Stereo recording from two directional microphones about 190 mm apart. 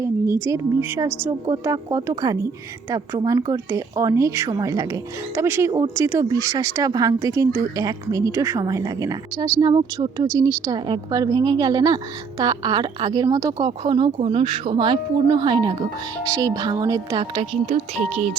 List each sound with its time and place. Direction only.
0.0 s a woman's voice: 15° right (ahead or behind)
17.7 s speech: 40° right (ahead or behind)